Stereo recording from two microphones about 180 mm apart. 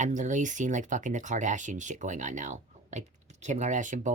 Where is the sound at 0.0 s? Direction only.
45° right (ahead or behind).